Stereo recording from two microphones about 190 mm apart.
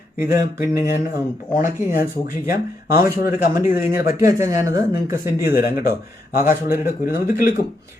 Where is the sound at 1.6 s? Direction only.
45° left (ahead or behind).